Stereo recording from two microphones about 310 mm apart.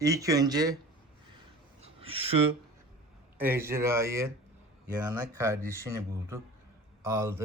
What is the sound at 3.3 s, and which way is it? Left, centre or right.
Speech, centre.